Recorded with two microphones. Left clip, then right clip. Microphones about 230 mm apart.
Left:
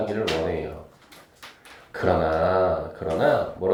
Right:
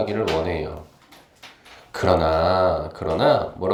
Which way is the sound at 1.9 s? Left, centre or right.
Right.